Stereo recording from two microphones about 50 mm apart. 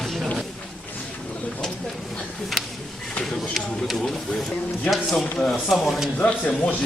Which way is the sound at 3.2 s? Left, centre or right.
Centre.